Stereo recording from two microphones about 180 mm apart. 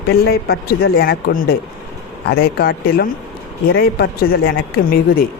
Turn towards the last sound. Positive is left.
turn(degrees=55)  # may be behind; listen again after turning